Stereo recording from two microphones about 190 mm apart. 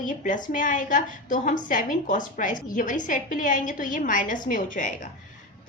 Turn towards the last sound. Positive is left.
turn(degrees=45)  # may be behind; listen again after turning